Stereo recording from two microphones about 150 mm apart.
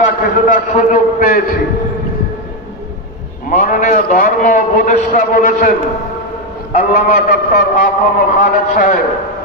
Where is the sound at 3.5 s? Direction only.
60° left (ahead or behind).